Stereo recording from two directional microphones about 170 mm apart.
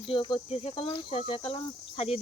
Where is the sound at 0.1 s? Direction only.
30° left (ahead or behind).